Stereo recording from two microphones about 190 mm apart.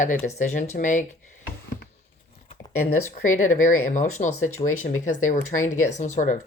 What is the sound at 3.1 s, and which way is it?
Speech, 40° left (ahead or behind).